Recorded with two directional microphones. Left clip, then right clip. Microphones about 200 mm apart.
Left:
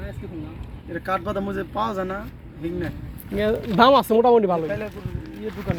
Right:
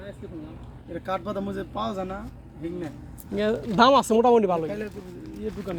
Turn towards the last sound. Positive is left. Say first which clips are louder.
# left 3 dB
turn(degrees=-55)  # may be behind; listen again after turning